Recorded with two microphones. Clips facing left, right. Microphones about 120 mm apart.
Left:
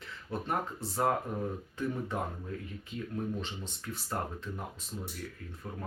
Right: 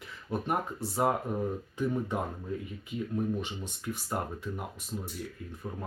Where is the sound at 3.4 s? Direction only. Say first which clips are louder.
Right 4 dB; 15° right (ahead or behind).